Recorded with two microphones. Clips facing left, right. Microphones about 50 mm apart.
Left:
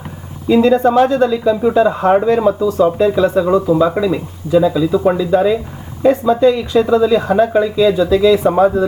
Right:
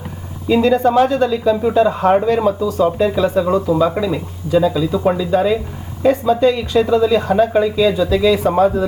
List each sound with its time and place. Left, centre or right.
0.4 s speech: centre
0.7 s speech: left
1.1 s speech: centre
8.4 s speech: centre